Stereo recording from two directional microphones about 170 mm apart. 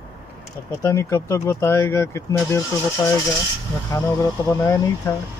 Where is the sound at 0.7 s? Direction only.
15° left (ahead or behind).